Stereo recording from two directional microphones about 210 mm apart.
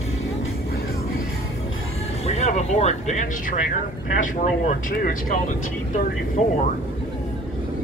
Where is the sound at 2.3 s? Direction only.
30° left (ahead or behind).